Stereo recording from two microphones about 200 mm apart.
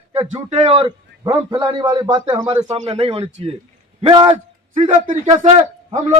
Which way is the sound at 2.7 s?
30° right (ahead or behind).